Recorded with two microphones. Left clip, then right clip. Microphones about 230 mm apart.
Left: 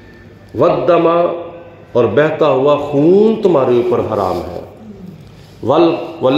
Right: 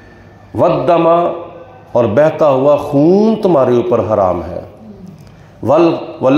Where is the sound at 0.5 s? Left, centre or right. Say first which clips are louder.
Even; right.